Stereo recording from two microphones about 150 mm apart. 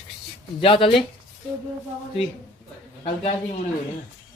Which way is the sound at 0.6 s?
35° left (ahead or behind).